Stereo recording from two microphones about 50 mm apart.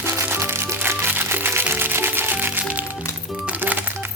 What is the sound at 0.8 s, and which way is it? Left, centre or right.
Music, right.